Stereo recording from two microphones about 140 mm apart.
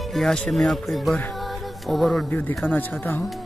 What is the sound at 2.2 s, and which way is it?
Speech, 15° left (ahead or behind).